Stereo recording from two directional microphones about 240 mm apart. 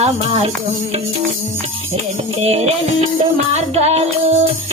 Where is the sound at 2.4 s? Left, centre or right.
Right.